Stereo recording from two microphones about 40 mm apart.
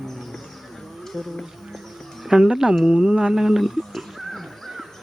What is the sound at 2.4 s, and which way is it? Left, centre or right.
Speech, centre.